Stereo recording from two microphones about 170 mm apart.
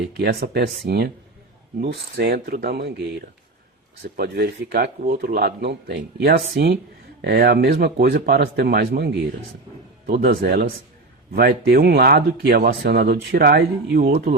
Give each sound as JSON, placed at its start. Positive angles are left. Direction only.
{"t": 0.2, "sound": "speech", "side_deg": -65}
{"t": 2.1, "sound": "speech", "side_deg": -65}
{"t": 4.2, "sound": "speech", "side_deg": -65}